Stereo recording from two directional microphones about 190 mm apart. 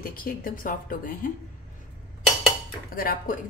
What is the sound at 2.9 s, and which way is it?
Speech, 50° left (ahead or behind).